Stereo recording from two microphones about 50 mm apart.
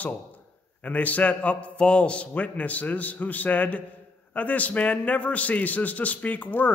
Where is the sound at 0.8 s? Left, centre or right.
Left.